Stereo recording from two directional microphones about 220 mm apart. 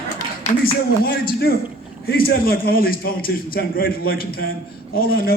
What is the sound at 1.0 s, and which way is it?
A man's voice, 45° left (ahead or behind).